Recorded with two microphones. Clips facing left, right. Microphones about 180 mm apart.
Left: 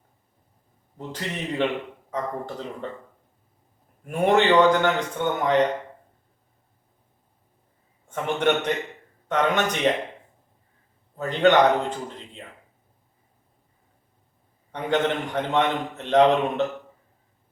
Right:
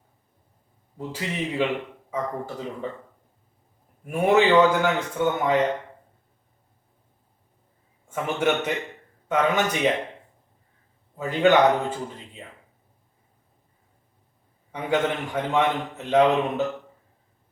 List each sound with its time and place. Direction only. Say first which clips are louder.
0.9 s a man's voice: right 2 dB; 10° right (ahead or behind)
4.0 s a man's voice: even; 5° right (ahead or behind)
8.1 s a man's voice: left 1 dB; 5° right (ahead or behind)
11.2 s a man's voice: even; 10° right (ahead or behind)
14.7 s a man's voice: left 1 dB; 5° right (ahead or behind)